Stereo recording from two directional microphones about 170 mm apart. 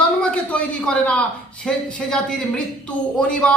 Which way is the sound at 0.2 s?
5° left (ahead or behind).